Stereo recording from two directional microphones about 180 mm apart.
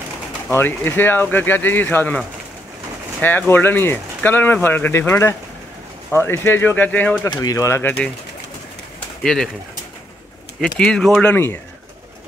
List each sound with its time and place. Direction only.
0.6 s speech: 10° left (ahead or behind)
7.2 s speech: 20° left (ahead or behind)
9.2 s speech: centre (ahead or behind)
10.6 s speech: 5° left (ahead or behind)